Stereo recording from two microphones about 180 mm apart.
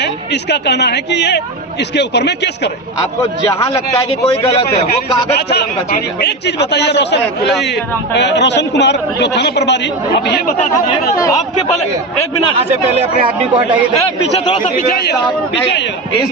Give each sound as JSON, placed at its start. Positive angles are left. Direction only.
{"t": 0.5, "sound": "a man's voice", "side_deg": 70}
{"t": 6.2, "sound": "a man's voice", "side_deg": 70}